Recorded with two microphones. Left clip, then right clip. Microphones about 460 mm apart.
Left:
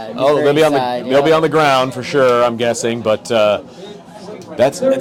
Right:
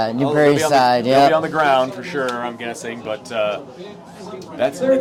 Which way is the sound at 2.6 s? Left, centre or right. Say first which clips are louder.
Left 11 dB; left.